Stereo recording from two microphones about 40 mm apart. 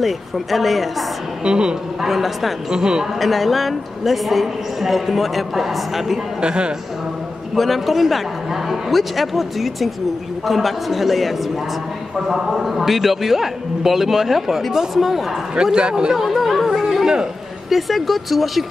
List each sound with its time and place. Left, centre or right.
0.0 s speech: centre
1.4 s a man's voice: right
2.0 s speech: centre
2.7 s speech: centre
3.2 s speech: centre
6.4 s a man's voice: right
7.5 s speech: centre
15.5 s a man's voice: right
16.1 s chatter: centre
17.6 s speech: centre